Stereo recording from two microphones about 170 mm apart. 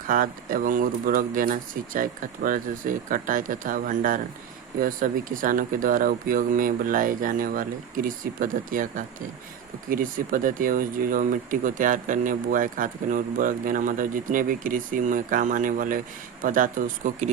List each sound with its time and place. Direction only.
0.1 s speech: 55° right (ahead or behind)